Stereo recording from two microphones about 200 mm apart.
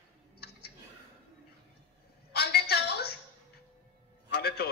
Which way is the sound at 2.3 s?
55° left (ahead or behind).